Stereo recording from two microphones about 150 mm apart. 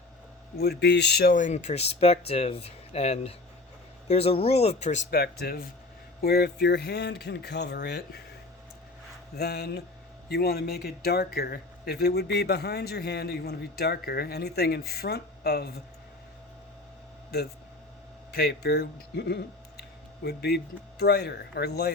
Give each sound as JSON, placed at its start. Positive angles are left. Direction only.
{"t": 0.6, "sound": "speech", "side_deg": 90}
{"t": 5.1, "sound": "speech", "side_deg": 90}
{"t": 9.3, "sound": "speech", "side_deg": 90}
{"t": 18.3, "sound": "speech", "side_deg": 90}
{"t": 20.2, "sound": "speech", "side_deg": 90}